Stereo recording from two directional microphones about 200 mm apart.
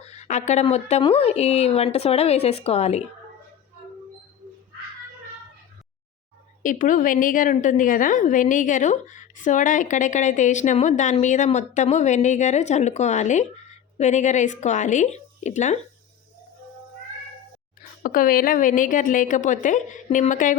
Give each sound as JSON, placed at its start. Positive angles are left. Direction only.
{"t": 0.0, "sound": "a woman's voice", "side_deg": 35}
{"t": 6.6, "sound": "a woman's voice", "side_deg": 40}
{"t": 18.0, "sound": "a woman's voice", "side_deg": 45}